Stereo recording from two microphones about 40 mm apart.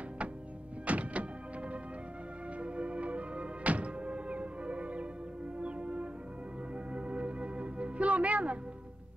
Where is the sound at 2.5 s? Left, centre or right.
Right.